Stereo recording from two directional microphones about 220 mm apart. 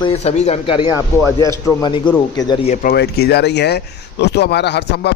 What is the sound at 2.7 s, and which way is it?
Speech, 45° left (ahead or behind).